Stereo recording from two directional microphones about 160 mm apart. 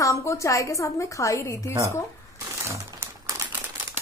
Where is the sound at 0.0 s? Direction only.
20° left (ahead or behind).